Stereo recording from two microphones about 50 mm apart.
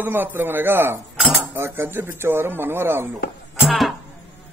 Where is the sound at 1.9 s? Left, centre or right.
Right.